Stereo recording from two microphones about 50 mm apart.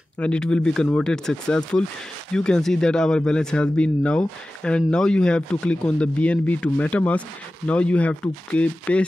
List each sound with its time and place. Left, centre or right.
0.2 s speech: centre